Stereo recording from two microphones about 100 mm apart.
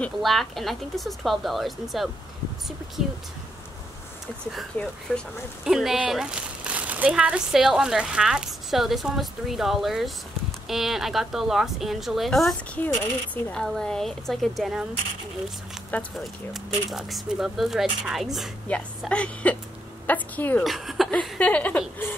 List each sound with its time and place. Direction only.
0.2 s speech: centre (ahead or behind)
4.7 s speech: 15° left (ahead or behind)
5.7 s speech: 5° right (ahead or behind)
12.7 s speech: 15° left (ahead or behind); by 14.9 s centre (ahead or behind)
16.2 s speech: centre (ahead or behind)
18.7 s speech: 10° left (ahead or behind)
20.6 s speech: centre (ahead or behind); by 22.1 s 15° left (ahead or behind)